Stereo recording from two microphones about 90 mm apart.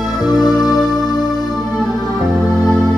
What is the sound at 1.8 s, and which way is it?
Music, 5° left (ahead or behind).